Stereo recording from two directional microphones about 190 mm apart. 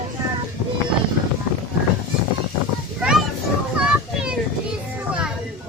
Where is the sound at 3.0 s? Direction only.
5° right (ahead or behind).